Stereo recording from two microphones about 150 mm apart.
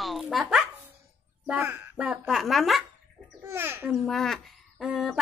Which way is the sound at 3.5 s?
15° right (ahead or behind).